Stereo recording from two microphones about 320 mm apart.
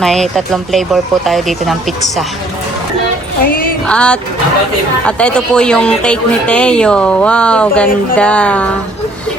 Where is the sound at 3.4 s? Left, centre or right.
Left.